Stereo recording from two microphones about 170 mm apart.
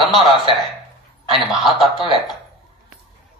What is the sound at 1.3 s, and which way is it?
Speech, centre (ahead or behind).